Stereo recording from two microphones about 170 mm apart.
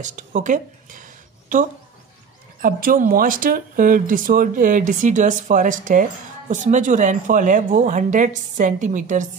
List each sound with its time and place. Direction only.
0.0 s speech: 45° right (ahead or behind)
2.6 s speech: 55° right (ahead or behind)